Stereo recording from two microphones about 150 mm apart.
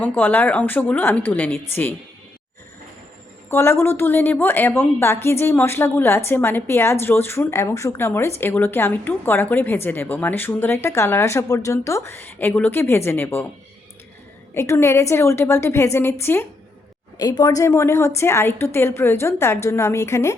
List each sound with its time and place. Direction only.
0.0 s a woman's voice: 10° left (ahead or behind)
3.5 s a woman's voice: 15° left (ahead or behind)
14.5 s a woman's voice: 15° left (ahead or behind)
17.2 s a woman's voice: 25° left (ahead or behind)